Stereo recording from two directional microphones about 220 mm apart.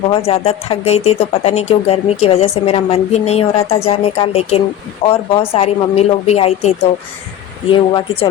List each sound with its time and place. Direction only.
0.1 s speech: 25° left (ahead or behind)
7.7 s speech: 25° left (ahead or behind)